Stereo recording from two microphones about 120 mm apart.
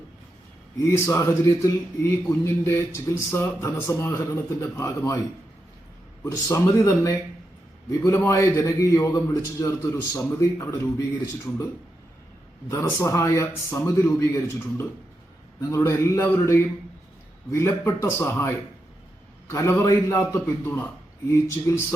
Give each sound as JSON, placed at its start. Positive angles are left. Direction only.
{"t": 0.8, "sound": "a man's voice", "side_deg": 25}
{"t": 6.2, "sound": "a man's voice", "side_deg": 25}
{"t": 12.7, "sound": "a man's voice", "side_deg": 20}